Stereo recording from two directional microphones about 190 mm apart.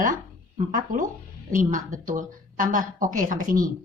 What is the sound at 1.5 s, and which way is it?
A woman's voice, 45° right (ahead or behind).